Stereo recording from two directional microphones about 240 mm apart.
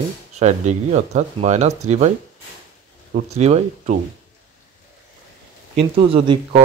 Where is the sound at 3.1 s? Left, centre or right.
Right.